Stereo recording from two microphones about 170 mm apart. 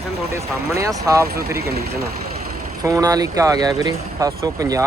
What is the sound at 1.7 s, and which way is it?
Speech, 65° right (ahead or behind).